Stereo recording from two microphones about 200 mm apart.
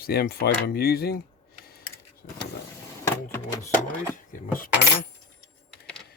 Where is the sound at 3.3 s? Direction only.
10° left (ahead or behind).